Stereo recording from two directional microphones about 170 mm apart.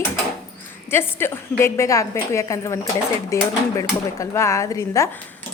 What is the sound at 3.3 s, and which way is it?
Speech, 20° left (ahead or behind).